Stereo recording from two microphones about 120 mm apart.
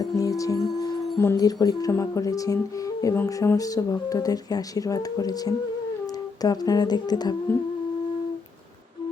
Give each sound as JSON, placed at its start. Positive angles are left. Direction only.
{"t": 0.0, "sound": "speech", "side_deg": 30}